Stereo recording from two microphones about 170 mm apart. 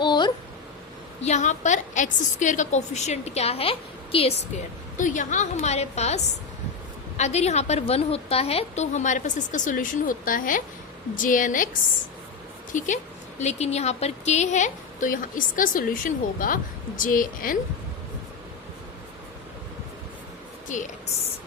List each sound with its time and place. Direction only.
0.0 s a sound: 25° left (ahead or behind)
1.2 s a woman's voice: 45° left (ahead or behind)
4.9 s a woman's voice: 50° left (ahead or behind)
12.7 s a woman's voice: 45° left (ahead or behind)
20.7 s speech: 45° left (ahead or behind)